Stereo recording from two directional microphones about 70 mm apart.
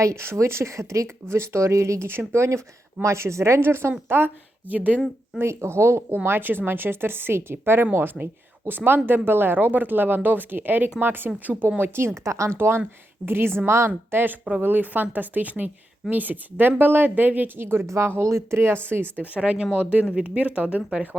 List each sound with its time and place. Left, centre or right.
0.0 s speech: right
4.7 s speech: right
5.4 s speech: right
12.5 s speech: right
17.8 s speech: right